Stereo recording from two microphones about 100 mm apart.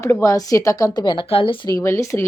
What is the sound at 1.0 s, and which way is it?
Speech, 55° left (ahead or behind).